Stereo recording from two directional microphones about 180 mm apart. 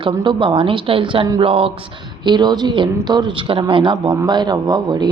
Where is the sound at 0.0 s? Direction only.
25° right (ahead or behind).